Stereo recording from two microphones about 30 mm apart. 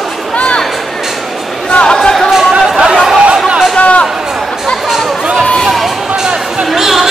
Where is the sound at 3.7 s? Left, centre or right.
Left.